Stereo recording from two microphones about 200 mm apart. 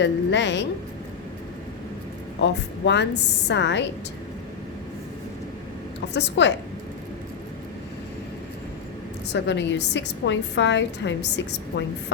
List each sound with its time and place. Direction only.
0.0 s a woman's voice: 60° left (ahead or behind)
2.4 s a woman's voice: 60° left (ahead or behind)
6.1 s a woman's voice: 60° left (ahead or behind)
9.3 s a woman's voice: 60° left (ahead or behind)